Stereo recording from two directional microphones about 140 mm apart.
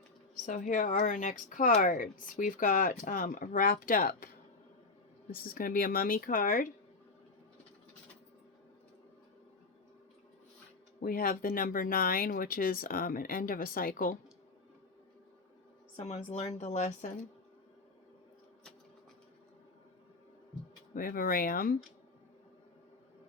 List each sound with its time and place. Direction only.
0.4 s speech: 65° left (ahead or behind); by 4.3 s 90° left
5.3 s speech: 90° left
11.0 s speech: 90° left
16.0 s speech: 50° left (ahead or behind)
20.9 s speech: 90° left